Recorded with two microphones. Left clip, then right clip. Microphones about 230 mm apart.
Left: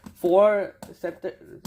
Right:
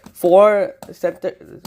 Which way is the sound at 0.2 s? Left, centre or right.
Right.